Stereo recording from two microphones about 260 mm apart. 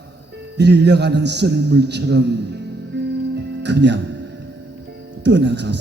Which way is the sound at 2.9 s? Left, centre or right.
Right.